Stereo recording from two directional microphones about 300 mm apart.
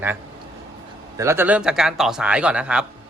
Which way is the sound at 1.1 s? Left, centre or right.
Centre.